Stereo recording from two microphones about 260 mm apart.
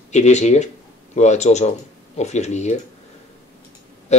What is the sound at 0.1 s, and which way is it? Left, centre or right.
Speech, left.